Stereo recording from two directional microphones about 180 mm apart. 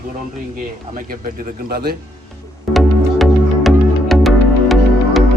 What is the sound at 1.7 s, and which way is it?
Speech, 60° right (ahead or behind).